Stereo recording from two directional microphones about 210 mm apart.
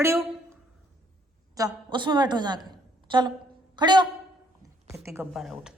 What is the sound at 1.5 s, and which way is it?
A woman's voice, 20° right (ahead or behind).